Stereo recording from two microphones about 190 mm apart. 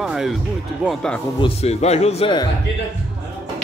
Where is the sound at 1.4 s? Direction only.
35° left (ahead or behind).